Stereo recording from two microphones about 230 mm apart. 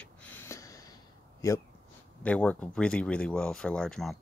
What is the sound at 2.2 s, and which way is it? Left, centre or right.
Speech, centre.